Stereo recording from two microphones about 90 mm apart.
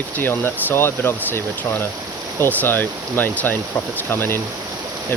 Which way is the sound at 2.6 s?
20° left (ahead or behind).